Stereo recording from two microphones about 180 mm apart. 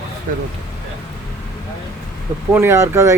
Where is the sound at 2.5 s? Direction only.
15° right (ahead or behind).